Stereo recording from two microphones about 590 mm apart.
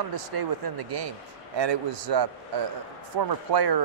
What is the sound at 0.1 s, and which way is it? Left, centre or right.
Speech, right.